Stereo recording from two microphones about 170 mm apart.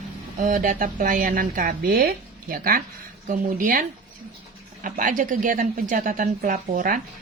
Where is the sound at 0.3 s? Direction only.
55° right (ahead or behind).